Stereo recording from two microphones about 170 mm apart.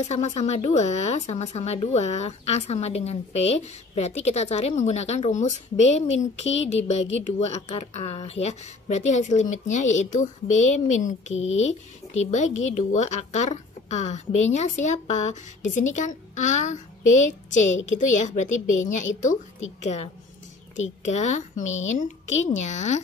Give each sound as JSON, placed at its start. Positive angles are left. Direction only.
{"t": 0.0, "sound": "a woman's voice", "side_deg": 40}